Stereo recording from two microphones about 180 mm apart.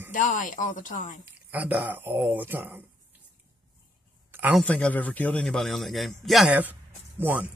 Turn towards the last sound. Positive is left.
turn(degrees=-10)  # may be behind; listen again after turning